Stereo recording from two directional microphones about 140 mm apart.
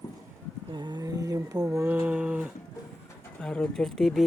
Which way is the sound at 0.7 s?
30° right (ahead or behind).